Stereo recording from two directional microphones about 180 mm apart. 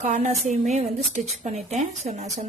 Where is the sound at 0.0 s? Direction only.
40° right (ahead or behind).